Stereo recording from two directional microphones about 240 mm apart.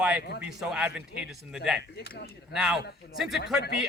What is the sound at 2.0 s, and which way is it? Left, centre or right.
Speech, left.